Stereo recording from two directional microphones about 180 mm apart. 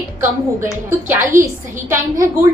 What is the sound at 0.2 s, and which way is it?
A woman's voice, 15° right (ahead or behind).